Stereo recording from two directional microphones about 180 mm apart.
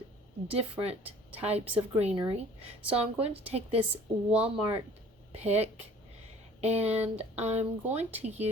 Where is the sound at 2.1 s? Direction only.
30° right (ahead or behind).